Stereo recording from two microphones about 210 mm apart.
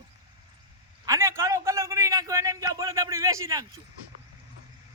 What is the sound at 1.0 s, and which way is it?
A man's voice, 15° right (ahead or behind).